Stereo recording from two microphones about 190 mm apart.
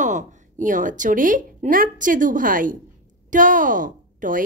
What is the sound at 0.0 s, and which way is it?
A woman's voice, 40° right (ahead or behind).